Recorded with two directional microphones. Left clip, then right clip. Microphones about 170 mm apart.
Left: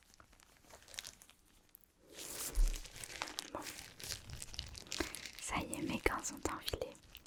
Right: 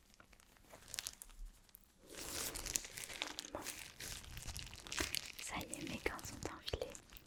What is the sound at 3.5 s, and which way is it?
Crumpling, 15° left (ahead or behind).